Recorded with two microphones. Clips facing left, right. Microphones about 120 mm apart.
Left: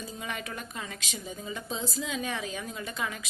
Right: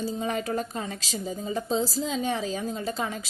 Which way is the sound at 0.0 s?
35° right (ahead or behind).